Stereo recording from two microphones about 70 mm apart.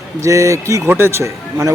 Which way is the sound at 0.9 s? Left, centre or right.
Right.